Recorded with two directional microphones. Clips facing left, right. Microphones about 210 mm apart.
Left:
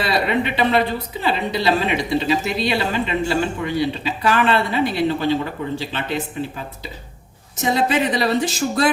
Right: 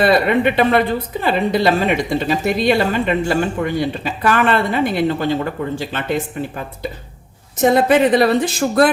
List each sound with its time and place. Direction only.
0.0 s a woman's voice: 55° right (ahead or behind)
7.6 s speech: 55° right (ahead or behind)